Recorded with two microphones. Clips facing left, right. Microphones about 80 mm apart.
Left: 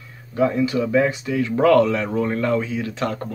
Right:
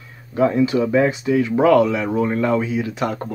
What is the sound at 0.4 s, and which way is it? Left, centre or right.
Speech, right.